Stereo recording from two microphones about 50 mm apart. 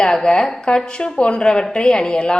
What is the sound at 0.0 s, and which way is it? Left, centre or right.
A woman's voice, centre.